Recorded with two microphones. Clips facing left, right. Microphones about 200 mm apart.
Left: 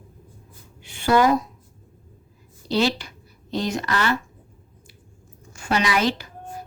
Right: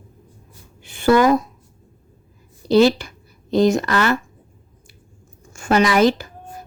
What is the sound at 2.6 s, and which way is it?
A woman's voice, 50° right (ahead or behind).